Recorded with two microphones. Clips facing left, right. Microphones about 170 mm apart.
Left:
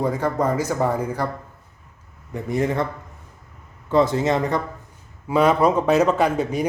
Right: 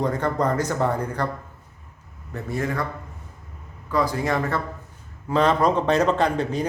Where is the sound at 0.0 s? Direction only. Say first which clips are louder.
Left 1 dB; 10° left (ahead or behind).